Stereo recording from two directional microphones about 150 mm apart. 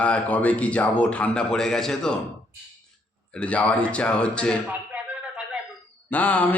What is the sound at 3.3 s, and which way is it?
Speech, 10° left (ahead or behind).